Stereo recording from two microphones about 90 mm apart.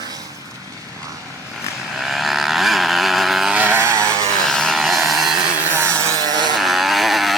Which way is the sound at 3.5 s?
20° right (ahead or behind).